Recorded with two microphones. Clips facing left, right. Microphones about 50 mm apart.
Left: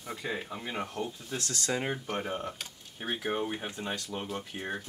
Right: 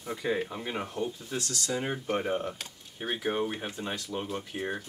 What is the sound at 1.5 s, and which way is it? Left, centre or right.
Speech, left.